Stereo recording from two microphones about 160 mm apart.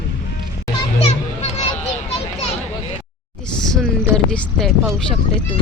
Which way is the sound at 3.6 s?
Centre (ahead or behind).